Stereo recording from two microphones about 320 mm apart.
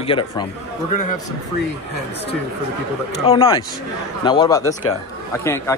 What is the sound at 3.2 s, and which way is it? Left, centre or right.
Speech, centre.